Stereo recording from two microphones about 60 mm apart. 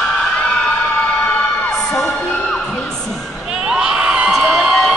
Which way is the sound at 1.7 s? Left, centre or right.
Centre.